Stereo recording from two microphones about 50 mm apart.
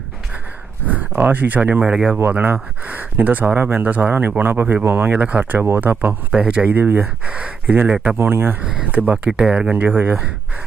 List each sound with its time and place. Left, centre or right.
0.9 s speech: right
1.8 s speech: centre
2.4 s speech: right
3.8 s speech: right
4.1 s speech: right
5.0 s speech: right
6.3 s speech: right
6.7 s speech: right
7.3 s speech: right
8.2 s speech: right
8.9 s speech: right
9.1 s speech: centre
9.7 s speech: right